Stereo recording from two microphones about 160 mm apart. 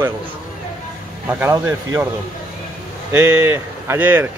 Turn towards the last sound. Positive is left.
turn(degrees=-10)  # may be behind; listen again after turning